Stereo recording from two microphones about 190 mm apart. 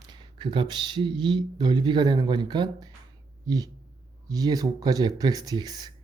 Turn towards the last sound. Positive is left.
turn(degrees=-20)  # may be behind; listen again after turning